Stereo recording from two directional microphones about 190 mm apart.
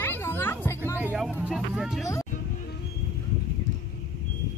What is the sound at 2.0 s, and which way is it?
Speech, 15° left (ahead or behind).